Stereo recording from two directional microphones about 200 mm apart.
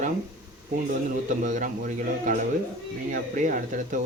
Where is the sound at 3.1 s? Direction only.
40° right (ahead or behind).